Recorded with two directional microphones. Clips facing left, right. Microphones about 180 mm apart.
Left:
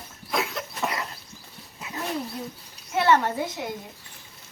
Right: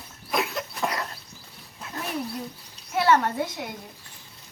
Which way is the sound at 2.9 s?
Centre (ahead or behind).